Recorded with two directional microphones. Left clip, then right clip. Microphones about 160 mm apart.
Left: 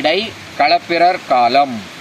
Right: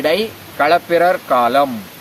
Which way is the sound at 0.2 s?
10° right (ahead or behind).